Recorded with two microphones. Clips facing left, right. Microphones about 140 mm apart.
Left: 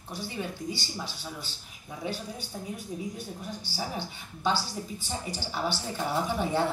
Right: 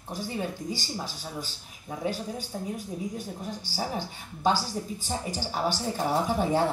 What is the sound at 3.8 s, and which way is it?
A woman's voice, 40° right (ahead or behind).